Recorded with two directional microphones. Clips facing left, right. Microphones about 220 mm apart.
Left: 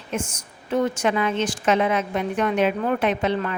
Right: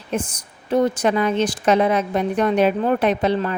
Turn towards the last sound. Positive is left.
turn(degrees=-35)  # may be behind; listen again after turning